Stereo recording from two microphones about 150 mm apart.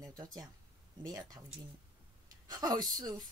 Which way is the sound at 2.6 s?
25° right (ahead or behind).